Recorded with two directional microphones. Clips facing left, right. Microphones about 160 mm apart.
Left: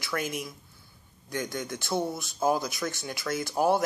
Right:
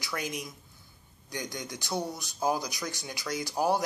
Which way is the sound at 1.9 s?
25° left (ahead or behind).